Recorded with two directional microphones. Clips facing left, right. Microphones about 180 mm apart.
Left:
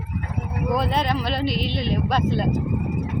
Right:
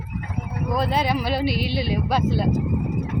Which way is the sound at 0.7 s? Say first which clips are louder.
Right 1 dB; centre (ahead or behind).